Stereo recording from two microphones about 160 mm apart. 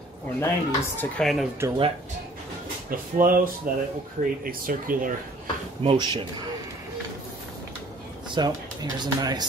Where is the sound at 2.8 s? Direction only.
60° right (ahead or behind).